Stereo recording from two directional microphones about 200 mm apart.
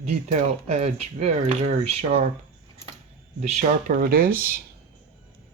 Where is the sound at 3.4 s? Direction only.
40° right (ahead or behind).